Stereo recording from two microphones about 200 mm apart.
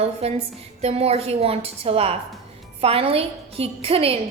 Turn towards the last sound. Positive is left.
turn(degrees=-30)  # may be behind; listen again after turning